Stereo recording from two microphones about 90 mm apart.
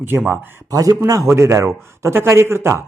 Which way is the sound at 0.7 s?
40° right (ahead or behind).